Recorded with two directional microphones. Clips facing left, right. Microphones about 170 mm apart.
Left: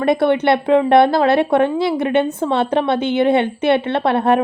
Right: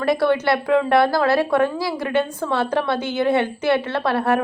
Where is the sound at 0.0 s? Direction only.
25° left (ahead or behind).